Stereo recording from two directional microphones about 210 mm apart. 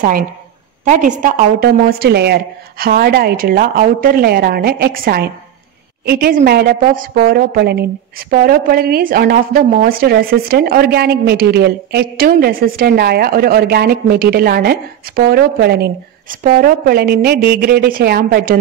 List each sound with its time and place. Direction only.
0.8 s a woman's voice: 35° right (ahead or behind)